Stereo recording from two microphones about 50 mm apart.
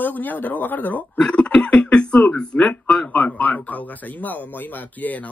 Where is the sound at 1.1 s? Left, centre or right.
Left.